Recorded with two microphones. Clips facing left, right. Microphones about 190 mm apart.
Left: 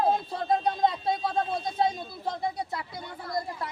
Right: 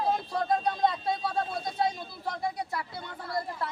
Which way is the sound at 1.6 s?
25° left (ahead or behind).